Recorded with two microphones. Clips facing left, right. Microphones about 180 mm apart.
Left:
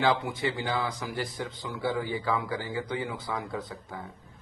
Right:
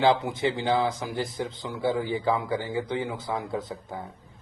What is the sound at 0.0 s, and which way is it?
Speech, 25° right (ahead or behind).